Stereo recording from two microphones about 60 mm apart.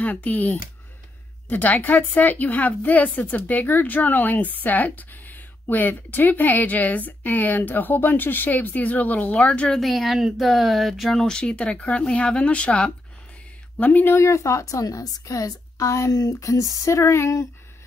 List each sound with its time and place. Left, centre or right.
0.0 s a woman's voice: left
9.5 s speech: centre
9.8 s speech: centre
13.7 s a woman's voice: left
14.1 s speech: left